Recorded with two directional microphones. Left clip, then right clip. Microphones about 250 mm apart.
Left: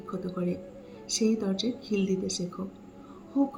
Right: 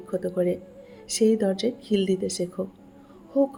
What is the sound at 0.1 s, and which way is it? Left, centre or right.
A woman's voice, right.